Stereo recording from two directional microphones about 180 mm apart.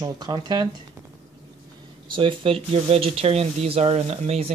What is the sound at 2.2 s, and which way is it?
Speech, 30° right (ahead or behind).